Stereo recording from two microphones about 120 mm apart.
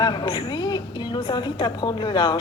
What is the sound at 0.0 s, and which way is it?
A woman's voice, 40° left (ahead or behind).